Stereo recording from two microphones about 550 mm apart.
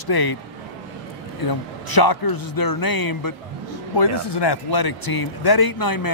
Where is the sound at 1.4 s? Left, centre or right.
Left.